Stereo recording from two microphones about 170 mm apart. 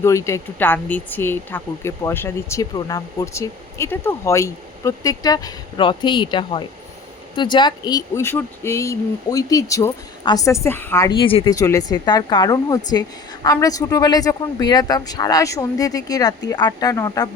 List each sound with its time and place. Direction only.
0.0 s speech: 15° left (ahead or behind)
11.2 s speech: 30° left (ahead or behind)
11.5 s speech: 20° left (ahead or behind)